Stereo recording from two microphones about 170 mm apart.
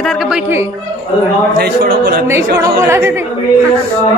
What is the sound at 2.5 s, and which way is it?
Speech, 15° right (ahead or behind).